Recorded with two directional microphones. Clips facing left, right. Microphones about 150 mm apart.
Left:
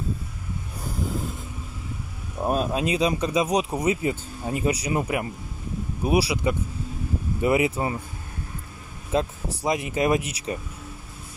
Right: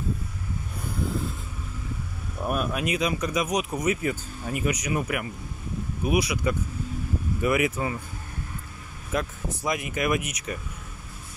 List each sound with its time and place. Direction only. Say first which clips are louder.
2.4 s speech: left 3 dB; 30° left (ahead or behind)
9.1 s speech: left 4 dB; 30° left (ahead or behind)